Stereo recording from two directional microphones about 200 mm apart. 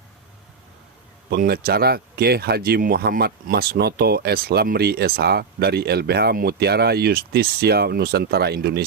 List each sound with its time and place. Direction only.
1.3 s speech: 50° right (ahead or behind)